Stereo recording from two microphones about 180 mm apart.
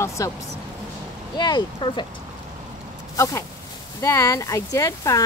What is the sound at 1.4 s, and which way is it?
Speech, 25° left (ahead or behind).